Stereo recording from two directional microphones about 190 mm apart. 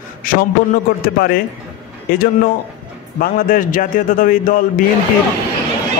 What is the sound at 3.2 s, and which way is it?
A man's voice, 45° left (ahead or behind).